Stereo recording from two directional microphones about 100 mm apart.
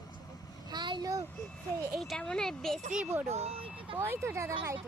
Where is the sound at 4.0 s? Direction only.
25° right (ahead or behind).